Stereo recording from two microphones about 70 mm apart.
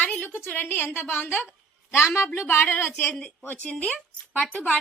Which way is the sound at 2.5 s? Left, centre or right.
Left.